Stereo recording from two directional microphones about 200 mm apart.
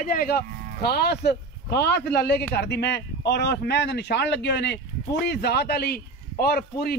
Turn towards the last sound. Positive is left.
turn(degrees=50)  # may be behind; listen again after turning